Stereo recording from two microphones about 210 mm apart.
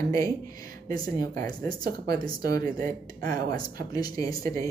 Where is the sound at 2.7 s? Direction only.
40° right (ahead or behind).